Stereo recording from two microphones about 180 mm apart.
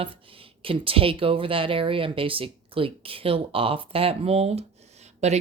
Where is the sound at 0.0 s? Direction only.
30° right (ahead or behind).